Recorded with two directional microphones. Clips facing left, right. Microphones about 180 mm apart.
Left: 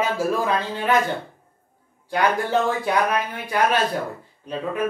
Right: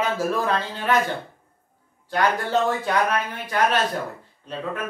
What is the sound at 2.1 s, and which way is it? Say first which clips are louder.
Speech: left 1 dB; 15° left (ahead or behind).